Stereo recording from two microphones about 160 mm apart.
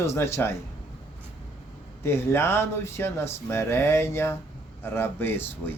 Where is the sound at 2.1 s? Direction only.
15° left (ahead or behind).